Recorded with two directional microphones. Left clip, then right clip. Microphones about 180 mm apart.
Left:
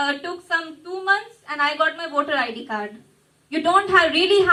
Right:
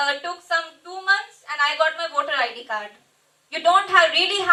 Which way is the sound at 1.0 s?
25° right (ahead or behind).